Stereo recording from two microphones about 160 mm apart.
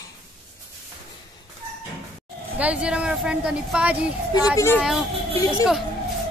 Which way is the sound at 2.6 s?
10° right (ahead or behind).